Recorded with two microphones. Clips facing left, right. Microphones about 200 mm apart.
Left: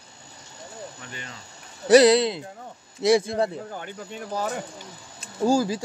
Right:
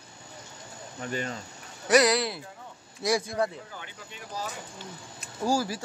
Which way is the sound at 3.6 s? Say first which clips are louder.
Left 9 dB; 50° left (ahead or behind).